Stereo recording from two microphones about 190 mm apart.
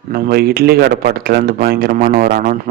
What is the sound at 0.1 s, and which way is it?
Speech, 55° right (ahead or behind).